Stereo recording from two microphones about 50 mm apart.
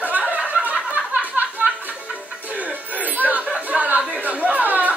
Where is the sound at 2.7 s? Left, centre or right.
Right.